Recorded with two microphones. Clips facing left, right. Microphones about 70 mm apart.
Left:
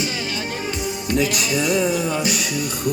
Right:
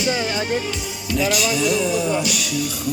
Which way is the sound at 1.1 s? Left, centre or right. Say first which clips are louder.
Right 1 dB; left.